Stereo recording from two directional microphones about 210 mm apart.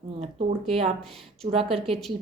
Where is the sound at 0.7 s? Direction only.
25° right (ahead or behind).